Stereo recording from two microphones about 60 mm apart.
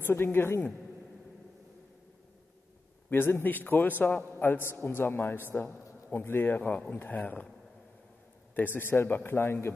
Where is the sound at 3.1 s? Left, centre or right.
Left.